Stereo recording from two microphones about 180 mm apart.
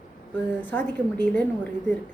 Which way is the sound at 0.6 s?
10° left (ahead or behind).